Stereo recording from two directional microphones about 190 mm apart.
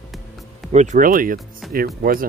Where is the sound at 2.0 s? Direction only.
45° right (ahead or behind).